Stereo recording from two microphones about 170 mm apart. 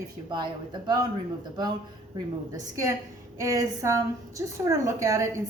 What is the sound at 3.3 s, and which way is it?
A woman's voice, 20° right (ahead or behind).